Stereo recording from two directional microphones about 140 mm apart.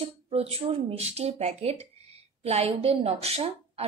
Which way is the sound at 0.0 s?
45° right (ahead or behind).